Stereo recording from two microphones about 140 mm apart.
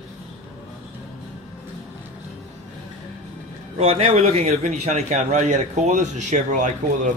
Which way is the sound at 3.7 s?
40° right (ahead or behind).